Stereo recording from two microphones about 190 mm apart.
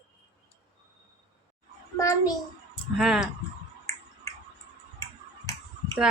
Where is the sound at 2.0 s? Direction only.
15° left (ahead or behind).